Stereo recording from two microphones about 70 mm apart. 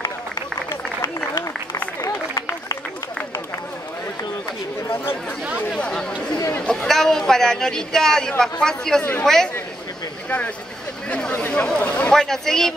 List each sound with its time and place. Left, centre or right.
5.7 s speech: centre
11.1 s speech: centre
12.1 s speech: centre